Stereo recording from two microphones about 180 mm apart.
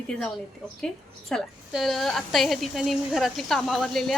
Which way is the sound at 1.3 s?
Centre (ahead or behind).